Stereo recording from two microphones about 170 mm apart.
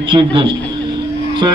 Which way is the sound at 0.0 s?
30° right (ahead or behind).